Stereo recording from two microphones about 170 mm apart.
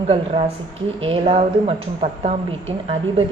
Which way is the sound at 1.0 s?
30° right (ahead or behind).